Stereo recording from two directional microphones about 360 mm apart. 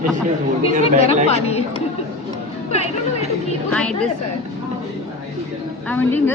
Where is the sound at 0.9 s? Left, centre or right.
Centre.